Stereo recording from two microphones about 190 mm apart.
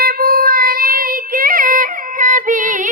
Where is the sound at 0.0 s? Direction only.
50° right (ahead or behind).